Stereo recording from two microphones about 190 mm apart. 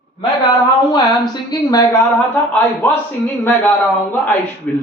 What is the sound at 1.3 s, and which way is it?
Speech, 20° left (ahead or behind).